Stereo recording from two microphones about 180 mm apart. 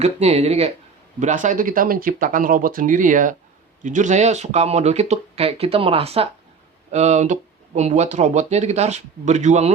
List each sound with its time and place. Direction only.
0.0 s speech: 35° right (ahead or behind)